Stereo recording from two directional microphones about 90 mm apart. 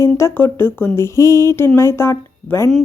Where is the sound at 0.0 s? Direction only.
30° left (ahead or behind).